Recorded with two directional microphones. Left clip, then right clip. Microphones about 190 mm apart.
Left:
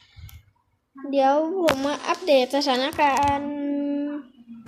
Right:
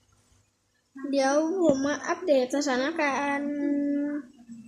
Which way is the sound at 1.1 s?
5° right (ahead or behind).